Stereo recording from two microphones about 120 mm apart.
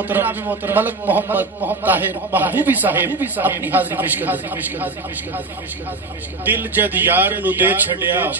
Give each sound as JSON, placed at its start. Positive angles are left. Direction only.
{"t": 0.0, "sound": "a man's voice", "side_deg": -15}
{"t": 6.5, "sound": "a man's voice", "side_deg": -15}